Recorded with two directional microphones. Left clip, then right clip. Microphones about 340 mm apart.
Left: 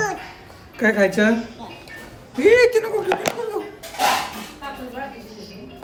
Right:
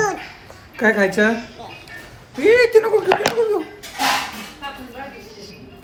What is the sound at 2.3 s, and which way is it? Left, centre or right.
Speech, centre.